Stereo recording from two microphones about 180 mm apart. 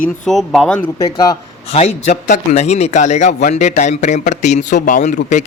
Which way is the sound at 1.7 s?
40° left (ahead or behind).